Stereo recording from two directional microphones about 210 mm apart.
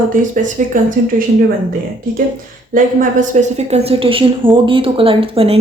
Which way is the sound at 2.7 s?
40° right (ahead or behind).